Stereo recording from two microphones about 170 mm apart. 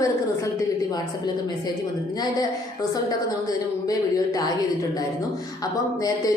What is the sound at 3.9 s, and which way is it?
Speech, 20° left (ahead or behind).